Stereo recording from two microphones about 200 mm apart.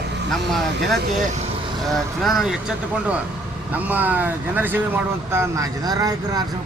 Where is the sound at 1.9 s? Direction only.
Centre (ahead or behind).